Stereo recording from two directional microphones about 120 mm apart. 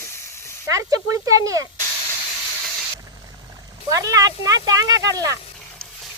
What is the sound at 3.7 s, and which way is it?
Speech, 30° right (ahead or behind).